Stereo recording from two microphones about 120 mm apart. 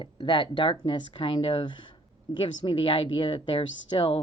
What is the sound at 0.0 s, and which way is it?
Speech, 45° left (ahead or behind).